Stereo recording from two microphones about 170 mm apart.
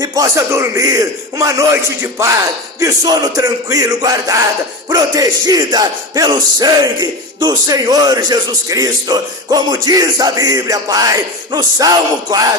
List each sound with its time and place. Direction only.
0.0 s speech: 20° right (ahead or behind)